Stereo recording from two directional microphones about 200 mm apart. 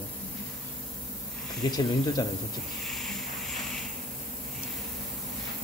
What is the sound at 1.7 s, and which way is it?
Speech, 20° left (ahead or behind).